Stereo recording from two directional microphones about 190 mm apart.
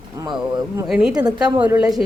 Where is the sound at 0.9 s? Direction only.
5° right (ahead or behind).